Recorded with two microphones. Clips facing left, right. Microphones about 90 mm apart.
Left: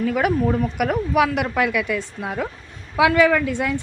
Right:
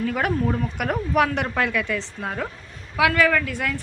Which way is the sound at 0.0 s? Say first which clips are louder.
Left 3 dB; 5° left (ahead or behind).